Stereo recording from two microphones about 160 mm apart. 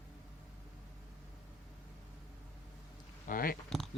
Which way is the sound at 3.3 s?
65° left (ahead or behind).